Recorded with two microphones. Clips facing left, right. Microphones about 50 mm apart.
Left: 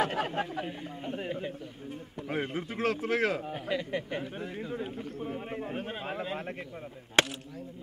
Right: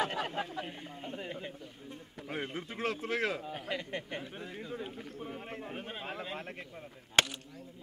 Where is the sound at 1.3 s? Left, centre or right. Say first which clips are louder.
Left 6 dB; centre.